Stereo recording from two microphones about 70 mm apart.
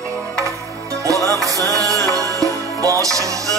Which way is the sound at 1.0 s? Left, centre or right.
Right.